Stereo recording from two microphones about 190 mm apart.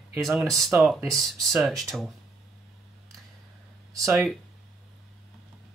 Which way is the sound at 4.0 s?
Centre (ahead or behind).